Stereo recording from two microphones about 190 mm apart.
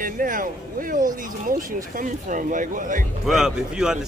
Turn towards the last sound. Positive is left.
turn(degrees=-5)  # may be behind; listen again after turning